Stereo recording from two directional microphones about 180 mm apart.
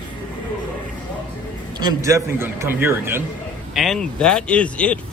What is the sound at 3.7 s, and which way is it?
A man's voice, centre (ahead or behind).